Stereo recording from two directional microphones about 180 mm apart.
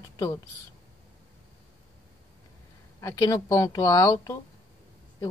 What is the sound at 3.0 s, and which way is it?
Speech, 20° left (ahead or behind).